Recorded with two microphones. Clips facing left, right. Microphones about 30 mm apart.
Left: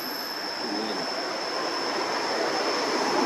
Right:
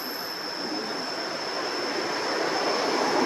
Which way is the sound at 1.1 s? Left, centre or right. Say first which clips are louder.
Left 1 dB; centre.